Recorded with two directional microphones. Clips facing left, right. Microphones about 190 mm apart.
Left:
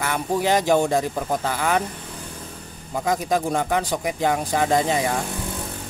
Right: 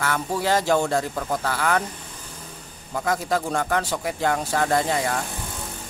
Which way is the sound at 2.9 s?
20° left (ahead or behind).